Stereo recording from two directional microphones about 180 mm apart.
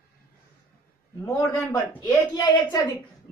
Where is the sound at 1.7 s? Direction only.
20° left (ahead or behind).